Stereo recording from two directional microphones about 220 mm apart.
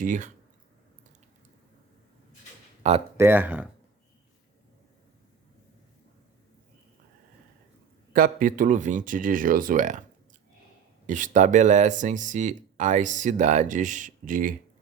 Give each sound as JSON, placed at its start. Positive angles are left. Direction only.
{"t": 0.0, "sound": "speech", "side_deg": -35}
{"t": 2.8, "sound": "speech", "side_deg": -30}
{"t": 3.2, "sound": "speech", "side_deg": -10}
{"t": 8.1, "sound": "speech", "side_deg": -40}
{"t": 11.0, "sound": "speech", "side_deg": -35}